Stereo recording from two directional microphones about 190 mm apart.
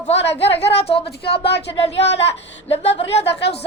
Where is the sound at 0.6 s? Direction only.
30° left (ahead or behind).